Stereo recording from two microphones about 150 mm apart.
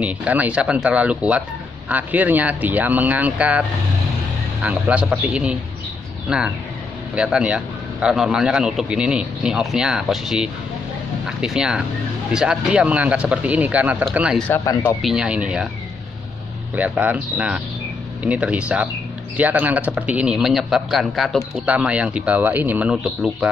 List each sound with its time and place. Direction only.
0.0 s a man's voice: 10° right (ahead or behind)
4.6 s a man's voice: 10° right (ahead or behind)
14.5 s speech: 25° left (ahead or behind)
15.0 s a man's voice: 5° right (ahead or behind)
16.7 s a man's voice: 10° right (ahead or behind)